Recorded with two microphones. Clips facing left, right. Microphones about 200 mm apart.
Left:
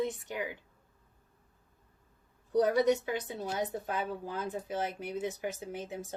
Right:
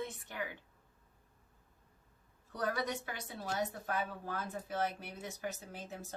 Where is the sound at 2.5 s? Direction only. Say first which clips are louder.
Left 11 dB; 20° left (ahead or behind).